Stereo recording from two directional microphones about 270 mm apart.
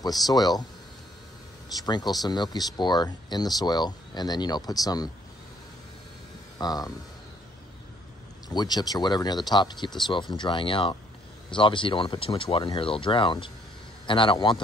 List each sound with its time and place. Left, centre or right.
0.0 s speech: centre
1.9 s speech: centre
6.6 s speech: centre
8.5 s speech: centre